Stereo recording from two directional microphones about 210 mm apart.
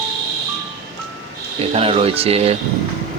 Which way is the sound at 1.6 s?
30° right (ahead or behind).